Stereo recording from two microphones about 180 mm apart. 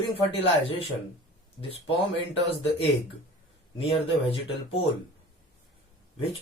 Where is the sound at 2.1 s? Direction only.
30° left (ahead or behind).